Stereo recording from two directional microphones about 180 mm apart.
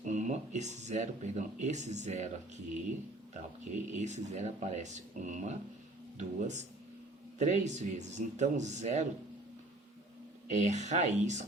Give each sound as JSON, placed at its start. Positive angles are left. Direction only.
{"t": 0.0, "sound": "speech", "side_deg": -40}
{"t": 3.6, "sound": "speech", "side_deg": -40}
{"t": 10.5, "sound": "speech", "side_deg": -40}